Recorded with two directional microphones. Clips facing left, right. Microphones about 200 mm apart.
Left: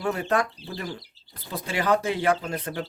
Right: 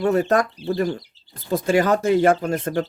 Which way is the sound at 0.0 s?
40° right (ahead or behind).